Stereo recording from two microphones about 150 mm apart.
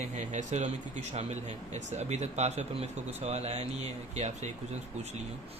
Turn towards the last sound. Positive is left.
turn(degrees=-50)  # may be behind; listen again after turning